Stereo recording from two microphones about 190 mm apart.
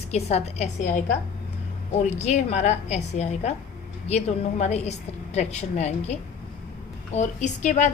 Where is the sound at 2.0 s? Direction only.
35° left (ahead or behind).